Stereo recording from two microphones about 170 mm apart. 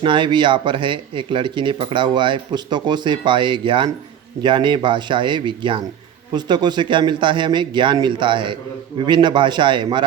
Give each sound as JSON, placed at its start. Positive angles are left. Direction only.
{"t": 0.0, "sound": "speech", "side_deg": -30}